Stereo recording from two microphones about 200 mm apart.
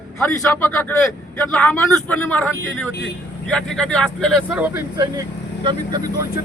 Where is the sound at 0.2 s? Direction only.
10° left (ahead or behind).